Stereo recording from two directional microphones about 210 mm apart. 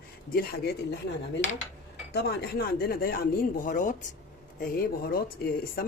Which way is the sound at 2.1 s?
50° left (ahead or behind).